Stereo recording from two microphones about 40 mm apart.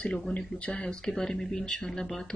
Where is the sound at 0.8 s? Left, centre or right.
Centre.